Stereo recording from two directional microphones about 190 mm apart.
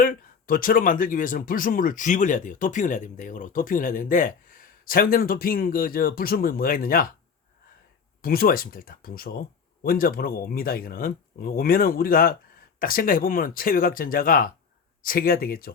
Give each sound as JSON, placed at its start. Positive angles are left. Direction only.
{"t": 0.0, "sound": "speech", "side_deg": 50}
{"t": 8.2, "sound": "speech", "side_deg": 50}